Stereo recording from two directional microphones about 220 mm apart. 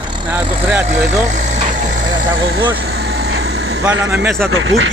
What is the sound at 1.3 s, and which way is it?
Vehicle, 35° right (ahead or behind).